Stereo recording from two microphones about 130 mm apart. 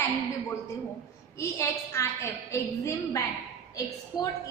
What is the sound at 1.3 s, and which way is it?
A woman's voice, 20° left (ahead or behind).